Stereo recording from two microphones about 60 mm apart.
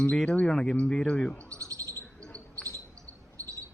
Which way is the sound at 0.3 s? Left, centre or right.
Centre.